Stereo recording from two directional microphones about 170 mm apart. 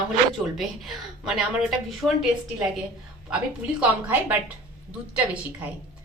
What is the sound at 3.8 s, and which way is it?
Speech, 10° right (ahead or behind).